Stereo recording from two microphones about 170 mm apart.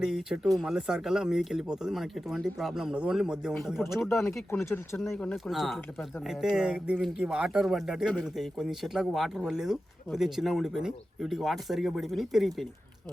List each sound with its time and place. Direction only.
0.0 s speech: 5° right (ahead or behind)
4.1 s speech: 15° left (ahead or behind); by 12.6 s centre (ahead or behind)